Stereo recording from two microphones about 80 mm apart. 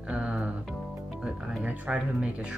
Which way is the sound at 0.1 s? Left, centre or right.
Centre.